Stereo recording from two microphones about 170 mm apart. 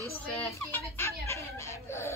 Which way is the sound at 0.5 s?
10° left (ahead or behind).